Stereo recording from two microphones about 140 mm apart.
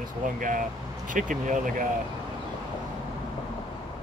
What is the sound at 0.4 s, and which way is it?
Speech, 70° right (ahead or behind).